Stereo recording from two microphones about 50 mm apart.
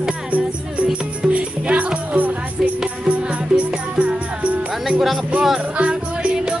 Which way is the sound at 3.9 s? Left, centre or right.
Right.